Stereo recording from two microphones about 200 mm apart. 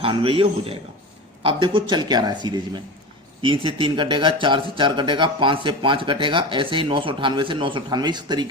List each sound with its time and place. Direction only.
0.0 s speech: 25° right (ahead or behind)
3.4 s speech: 25° right (ahead or behind)